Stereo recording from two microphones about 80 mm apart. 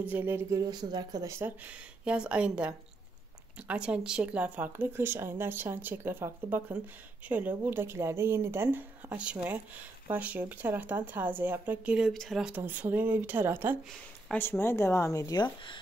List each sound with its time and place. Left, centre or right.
0.1 s speech: right
0.7 s speech: right
1.6 s speech: centre; by 8.8 s right
9.1 s speech: centre
12.1 s speech: centre
12.5 s speech: right
14.6 s speech: left